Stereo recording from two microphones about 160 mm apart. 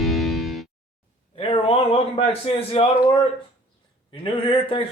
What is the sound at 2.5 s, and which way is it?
Speech, 40° left (ahead or behind).